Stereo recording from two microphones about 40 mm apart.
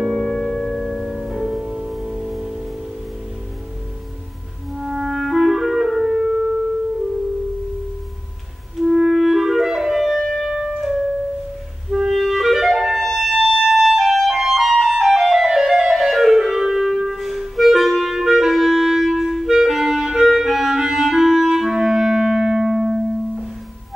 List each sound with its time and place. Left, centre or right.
0.0 s music: centre
4.7 s clarinet: centre
8.7 s clarinet: centre
10.1 s music: centre
10.5 s music: centre
12.1 s clarinet: centre
13.7 s music: centre
16.3 s clarinet: centre